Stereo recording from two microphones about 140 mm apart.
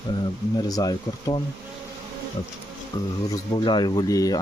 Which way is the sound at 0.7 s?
25° left (ahead or behind).